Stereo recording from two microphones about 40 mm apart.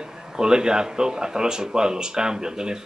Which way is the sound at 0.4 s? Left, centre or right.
Centre.